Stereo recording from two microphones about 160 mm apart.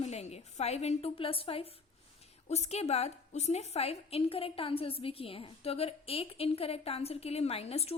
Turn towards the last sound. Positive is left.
turn(degrees=40)  # may be behind; listen again after turning